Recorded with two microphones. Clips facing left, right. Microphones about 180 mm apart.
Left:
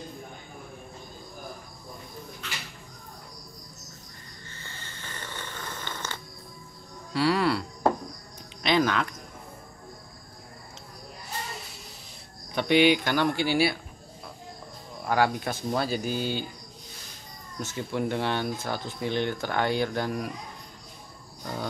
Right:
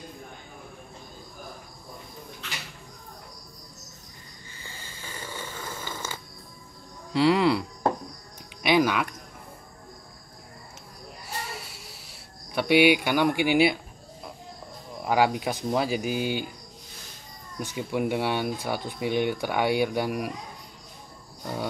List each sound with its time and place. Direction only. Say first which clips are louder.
4.5 s snoring: right 1 dB; 10° right (ahead or behind)
7.1 s speech: right 3 dB; 20° right (ahead or behind)
8.6 s speech: right 2 dB; 10° right (ahead or behind)
11.5 s a sound: right 1 dB; 5° right (ahead or behind)
12.5 s speech: right 1 dB; 10° right (ahead or behind)
15.0 s speech: right 2 dB; 15° right (ahead or behind)
17.6 s speech: right 2 dB; 15° right (ahead or behind)